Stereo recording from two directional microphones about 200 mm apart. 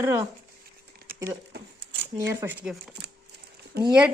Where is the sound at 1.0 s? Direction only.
50° right (ahead or behind).